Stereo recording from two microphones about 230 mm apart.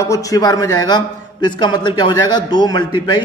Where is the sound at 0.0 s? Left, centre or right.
Centre.